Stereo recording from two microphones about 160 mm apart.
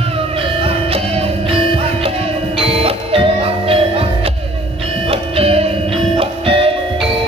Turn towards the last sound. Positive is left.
turn(degrees=-35)  # may be behind; listen again after turning